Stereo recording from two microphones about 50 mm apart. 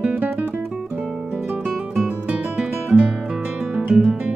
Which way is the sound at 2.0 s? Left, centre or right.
Right.